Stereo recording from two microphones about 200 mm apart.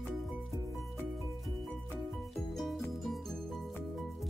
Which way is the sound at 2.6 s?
Centre (ahead or behind).